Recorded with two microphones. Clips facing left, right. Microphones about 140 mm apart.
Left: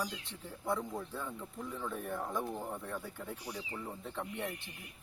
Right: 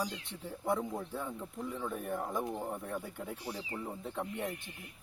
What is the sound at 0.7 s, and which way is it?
Speech, 25° right (ahead or behind).